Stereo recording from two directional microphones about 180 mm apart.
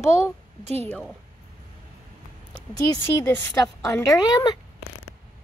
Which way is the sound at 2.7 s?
15° left (ahead or behind).